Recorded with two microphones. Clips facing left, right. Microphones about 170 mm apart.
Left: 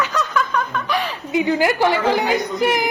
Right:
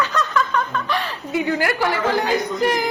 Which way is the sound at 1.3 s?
20° left (ahead or behind).